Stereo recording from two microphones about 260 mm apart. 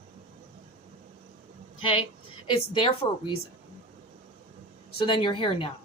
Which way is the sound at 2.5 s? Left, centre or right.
Left.